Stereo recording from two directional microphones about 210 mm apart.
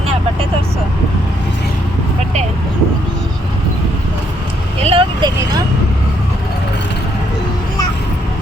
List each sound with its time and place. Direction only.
4.8 s vehicle: 25° right (ahead or behind)